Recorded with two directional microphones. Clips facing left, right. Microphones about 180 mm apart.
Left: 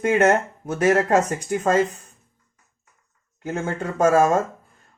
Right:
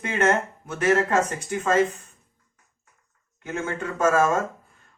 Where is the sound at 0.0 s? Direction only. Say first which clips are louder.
Left 5 dB; 40° left (ahead or behind).